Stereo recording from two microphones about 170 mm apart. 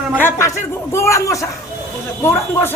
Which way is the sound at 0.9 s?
15° left (ahead or behind).